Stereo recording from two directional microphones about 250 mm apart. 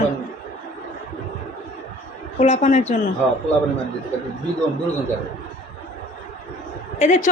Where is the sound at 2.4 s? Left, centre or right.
Left.